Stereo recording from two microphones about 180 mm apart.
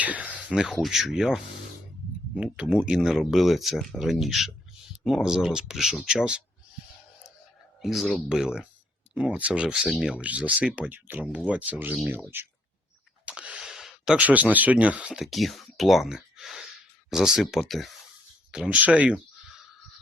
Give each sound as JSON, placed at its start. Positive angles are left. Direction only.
{"t": 0.0, "sound": "speech", "side_deg": -10}
{"t": 7.8, "sound": "speech", "side_deg": 0}